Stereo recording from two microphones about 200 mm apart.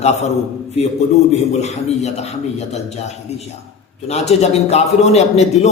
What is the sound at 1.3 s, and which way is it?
A man's voice, 35° left (ahead or behind).